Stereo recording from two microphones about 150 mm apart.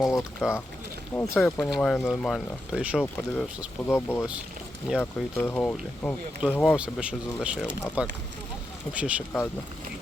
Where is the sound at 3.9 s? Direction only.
15° left (ahead or behind).